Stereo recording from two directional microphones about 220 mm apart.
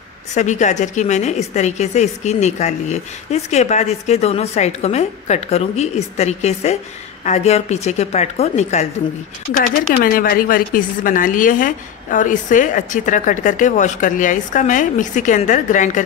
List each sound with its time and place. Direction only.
0.3 s a woman's voice: 30° left (ahead or behind)